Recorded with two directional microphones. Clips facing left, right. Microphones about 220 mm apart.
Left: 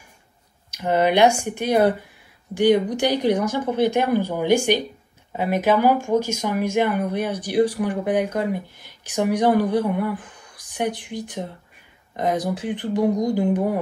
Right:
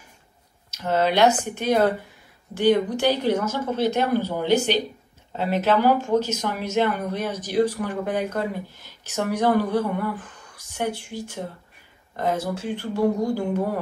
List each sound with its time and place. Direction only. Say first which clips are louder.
0.7 s speech: left 3 dB; 15° left (ahead or behind)